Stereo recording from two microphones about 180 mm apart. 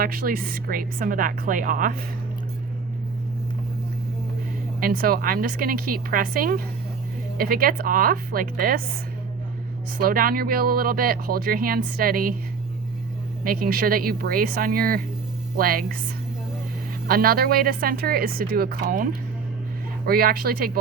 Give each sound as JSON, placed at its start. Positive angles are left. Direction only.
{"t": 0.0, "sound": "a woman's voice", "side_deg": -55}
{"t": 4.8, "sound": "a woman's voice", "side_deg": -55}
{"t": 10.0, "sound": "speech", "side_deg": -55}
{"t": 13.4, "sound": "a woman's voice", "side_deg": -55}
{"t": 17.1, "sound": "speech", "side_deg": -55}
{"t": 20.1, "sound": "speech", "side_deg": -55}